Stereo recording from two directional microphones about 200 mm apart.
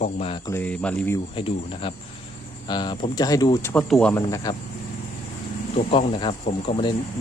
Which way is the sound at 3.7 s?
5° left (ahead or behind).